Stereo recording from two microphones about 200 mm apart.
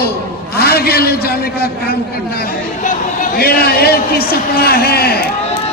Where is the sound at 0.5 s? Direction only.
50° left (ahead or behind).